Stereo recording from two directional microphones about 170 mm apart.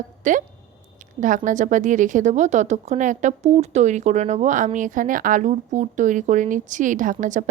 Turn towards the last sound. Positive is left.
turn(degrees=-50)  # may be behind; listen again after turning